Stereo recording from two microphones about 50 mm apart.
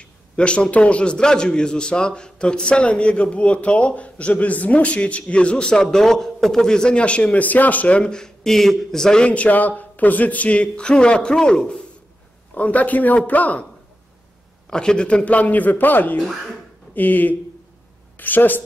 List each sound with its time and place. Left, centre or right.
0.0 s a man's voice: left
8.0 s a man's voice: centre
9.3 s a man's voice: left
12.5 s speech: left
14.7 s a man's voice: centre; by 18.6 s left